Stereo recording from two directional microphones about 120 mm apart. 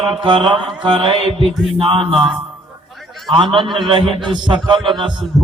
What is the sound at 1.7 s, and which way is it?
Speech, 50° right (ahead or behind).